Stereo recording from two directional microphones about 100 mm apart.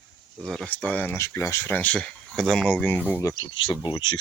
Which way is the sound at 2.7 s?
15° left (ahead or behind).